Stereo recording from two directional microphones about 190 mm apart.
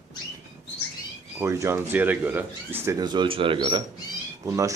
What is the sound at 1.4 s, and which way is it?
Speech, 15° right (ahead or behind).